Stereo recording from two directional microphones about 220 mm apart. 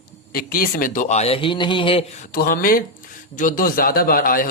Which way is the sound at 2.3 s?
40° left (ahead or behind).